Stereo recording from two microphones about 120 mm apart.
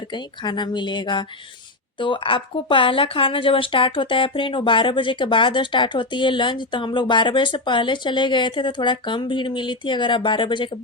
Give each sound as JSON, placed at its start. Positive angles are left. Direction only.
{"t": 0.1, "sound": "speech", "side_deg": 40}